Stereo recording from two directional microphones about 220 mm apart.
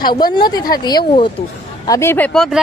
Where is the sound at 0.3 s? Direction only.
20° left (ahead or behind).